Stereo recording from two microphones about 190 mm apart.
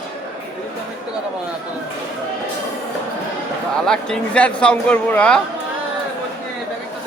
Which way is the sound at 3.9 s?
5° left (ahead or behind).